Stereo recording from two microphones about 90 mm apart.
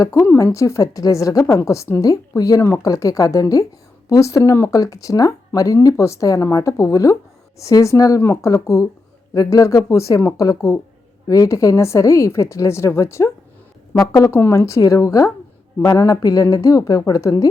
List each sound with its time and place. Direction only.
0.0 s speech: 35° left (ahead or behind)